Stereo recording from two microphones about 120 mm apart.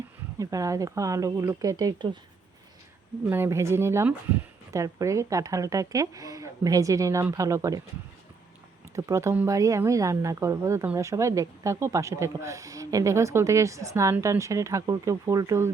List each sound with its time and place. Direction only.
0.3 s speech: 30° right (ahead or behind)
3.2 s speech: 20° right (ahead or behind)
9.0 s speech: 25° right (ahead or behind)